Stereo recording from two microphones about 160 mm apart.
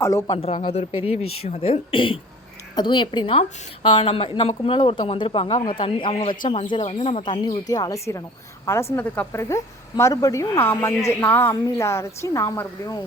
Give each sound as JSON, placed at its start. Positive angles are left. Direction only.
{"t": 0.0, "sound": "speech", "side_deg": 20}
{"t": 0.3, "sound": "a woman's voice", "side_deg": 35}